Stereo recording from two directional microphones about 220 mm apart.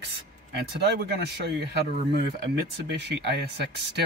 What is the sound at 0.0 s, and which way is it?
Speech, 50° right (ahead or behind).